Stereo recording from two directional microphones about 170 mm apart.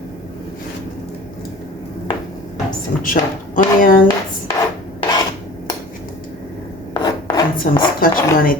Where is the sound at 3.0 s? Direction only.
50° left (ahead or behind).